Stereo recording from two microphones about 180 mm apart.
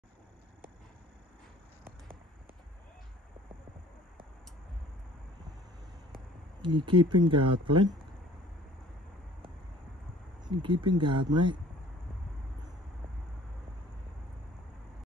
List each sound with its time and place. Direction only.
6.6 s speech: 25° right (ahead or behind)
10.4 s speech: 25° right (ahead or behind)